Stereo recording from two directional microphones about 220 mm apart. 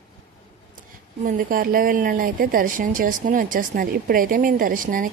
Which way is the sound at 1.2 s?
40° right (ahead or behind).